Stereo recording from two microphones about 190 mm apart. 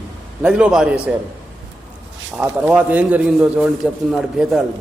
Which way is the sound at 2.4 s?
5° right (ahead or behind).